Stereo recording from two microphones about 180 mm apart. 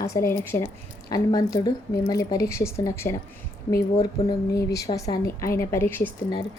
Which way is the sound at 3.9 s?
35° left (ahead or behind).